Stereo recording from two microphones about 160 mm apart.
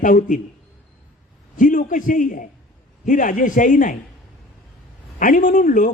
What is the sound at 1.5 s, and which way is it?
A man's voice, 55° left (ahead or behind).